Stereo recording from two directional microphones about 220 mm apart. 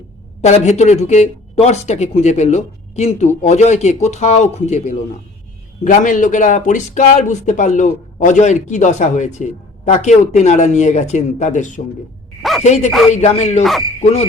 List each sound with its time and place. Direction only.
0.4 s speech: 30° left (ahead or behind)
12.4 s a sound: centre (ahead or behind)
12.6 s speech: 30° left (ahead or behind)